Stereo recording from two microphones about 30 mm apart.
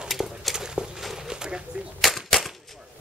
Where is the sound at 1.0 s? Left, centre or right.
Centre.